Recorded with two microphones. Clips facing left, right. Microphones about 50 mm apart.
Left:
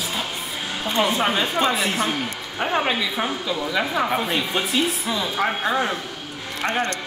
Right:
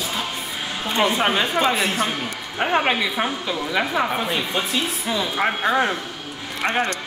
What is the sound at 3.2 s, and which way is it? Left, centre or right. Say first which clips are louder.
Speech: right 1 dB; centre.